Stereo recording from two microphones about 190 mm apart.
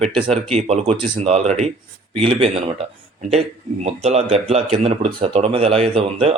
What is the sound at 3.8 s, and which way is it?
Speech, 35° right (ahead or behind).